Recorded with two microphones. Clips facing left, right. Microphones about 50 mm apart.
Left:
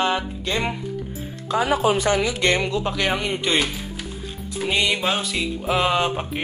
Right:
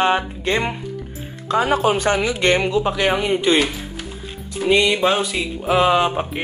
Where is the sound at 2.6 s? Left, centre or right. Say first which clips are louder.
Right 4 dB; centre.